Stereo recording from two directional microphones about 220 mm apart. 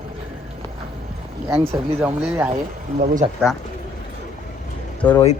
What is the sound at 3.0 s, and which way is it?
Speech, 40° right (ahead or behind).